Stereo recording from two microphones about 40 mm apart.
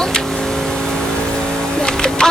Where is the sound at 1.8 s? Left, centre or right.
Centre.